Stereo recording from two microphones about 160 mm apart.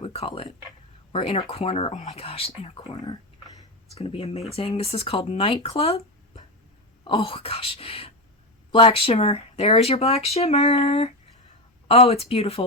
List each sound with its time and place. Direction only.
0.0 s speech: 40° left (ahead or behind)
3.9 s speech: 35° left (ahead or behind)